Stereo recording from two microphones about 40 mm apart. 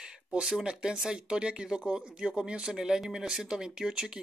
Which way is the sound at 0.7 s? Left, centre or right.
Centre.